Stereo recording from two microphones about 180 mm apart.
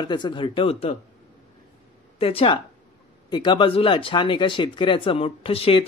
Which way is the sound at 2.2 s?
30° left (ahead or behind).